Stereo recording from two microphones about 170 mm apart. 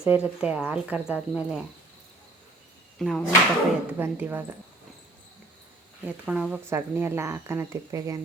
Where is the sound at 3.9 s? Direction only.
10° right (ahead or behind).